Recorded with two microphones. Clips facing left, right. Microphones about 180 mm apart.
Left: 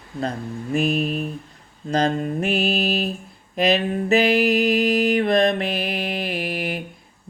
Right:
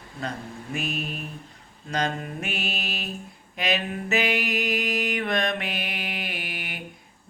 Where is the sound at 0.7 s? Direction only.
35° left (ahead or behind).